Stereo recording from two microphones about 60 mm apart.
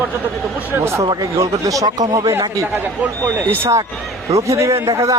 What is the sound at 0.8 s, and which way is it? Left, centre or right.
Speech, right.